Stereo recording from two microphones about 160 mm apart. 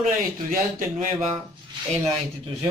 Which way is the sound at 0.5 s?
60° right (ahead or behind).